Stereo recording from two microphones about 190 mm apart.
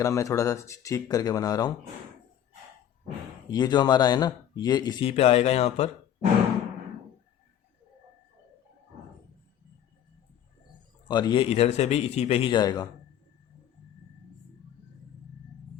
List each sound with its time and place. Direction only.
0.0 s speech: 15° left (ahead or behind)
3.5 s speech: 20° left (ahead or behind)
11.1 s a man's voice: 25° left (ahead or behind)